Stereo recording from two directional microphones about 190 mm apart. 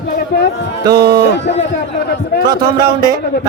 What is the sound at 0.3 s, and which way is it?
Speech, 55° left (ahead or behind).